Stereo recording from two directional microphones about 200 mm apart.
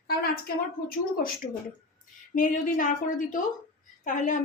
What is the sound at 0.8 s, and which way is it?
Speech, 45° left (ahead or behind).